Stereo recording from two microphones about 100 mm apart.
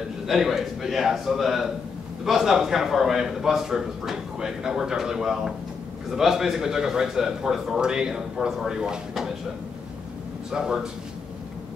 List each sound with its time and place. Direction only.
0.3 s a man's voice: 5° right (ahead or behind)
10.5 s a man's voice: 5° right (ahead or behind)